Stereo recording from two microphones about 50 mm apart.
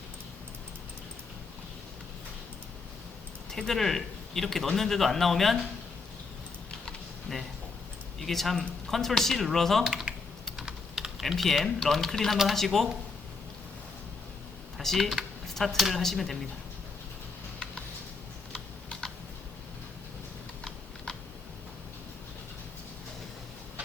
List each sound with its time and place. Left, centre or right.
3.5 s speech: centre
7.3 s a sound: centre
8.2 s speech: centre
9.8 s typing: centre
11.2 s speech: centre
14.8 s speech: centre
18.5 s typing: centre
20.7 s typing: centre